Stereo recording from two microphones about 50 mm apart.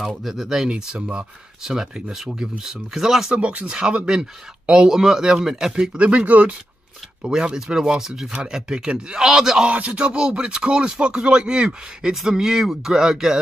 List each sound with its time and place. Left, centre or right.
0.0 s speech: centre
3.3 s speech: right
5.9 s speech: right
7.2 s speech: centre
9.7 s speech: right